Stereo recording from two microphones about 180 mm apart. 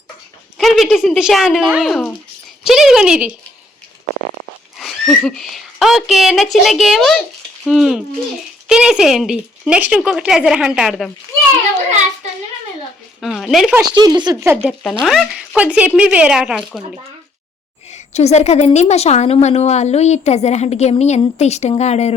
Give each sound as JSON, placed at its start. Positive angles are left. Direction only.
{"t": 0.6, "sound": "speech", "side_deg": 0}
{"t": 4.8, "sound": "speech", "side_deg": 0}
{"t": 13.2, "sound": "speech", "side_deg": 0}
{"t": 13.8, "sound": "speech", "side_deg": -20}
{"t": 14.5, "sound": "speech", "side_deg": -5}
{"t": 17.9, "sound": "a woman's voice", "side_deg": 35}